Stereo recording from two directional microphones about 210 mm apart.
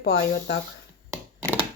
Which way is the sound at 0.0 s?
50° left (ahead or behind).